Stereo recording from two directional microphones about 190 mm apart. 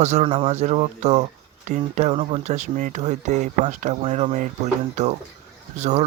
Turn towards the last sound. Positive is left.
turn(degrees=-35)  # may be behind; listen again after turning